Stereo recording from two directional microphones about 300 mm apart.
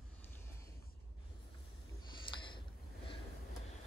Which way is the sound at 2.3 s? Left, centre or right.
Centre.